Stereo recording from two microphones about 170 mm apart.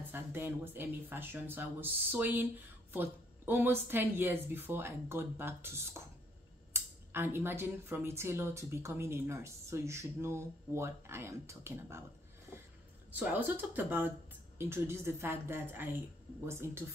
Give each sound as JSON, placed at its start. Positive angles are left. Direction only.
{"t": 0.1, "sound": "speech", "side_deg": -10}
{"t": 13.1, "sound": "speech", "side_deg": -10}